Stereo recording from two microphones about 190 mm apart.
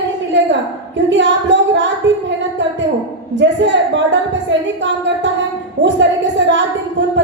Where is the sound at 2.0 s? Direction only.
75° right (ahead or behind).